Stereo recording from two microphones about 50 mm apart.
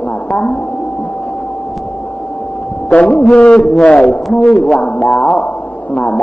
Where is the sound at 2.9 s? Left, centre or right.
Left.